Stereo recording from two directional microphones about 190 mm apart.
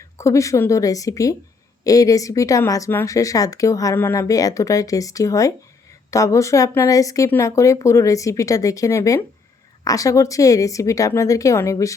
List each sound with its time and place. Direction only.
0.2 s speech: 15° left (ahead or behind)